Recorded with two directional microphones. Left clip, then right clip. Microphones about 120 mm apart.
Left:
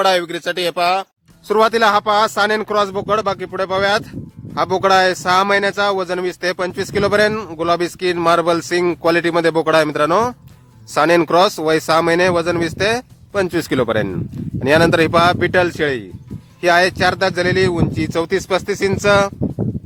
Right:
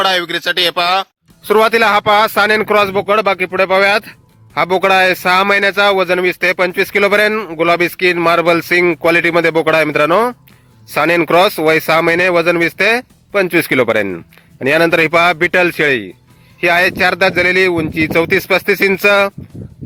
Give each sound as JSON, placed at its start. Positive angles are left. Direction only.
{"t": 0.0, "sound": "speech", "side_deg": -15}
{"t": 1.5, "sound": "speech", "side_deg": -35}
{"t": 7.3, "sound": "speech", "side_deg": -15}